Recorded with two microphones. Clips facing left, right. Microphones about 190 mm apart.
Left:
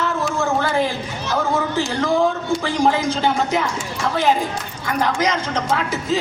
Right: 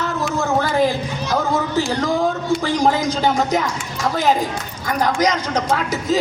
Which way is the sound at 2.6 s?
40° right (ahead or behind).